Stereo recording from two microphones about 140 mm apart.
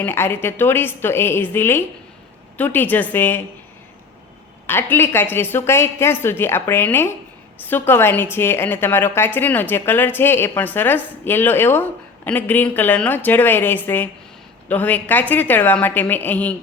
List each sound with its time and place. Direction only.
0.0 s a woman's voice: 15° left (ahead or behind)
4.6 s a woman's voice: 15° left (ahead or behind)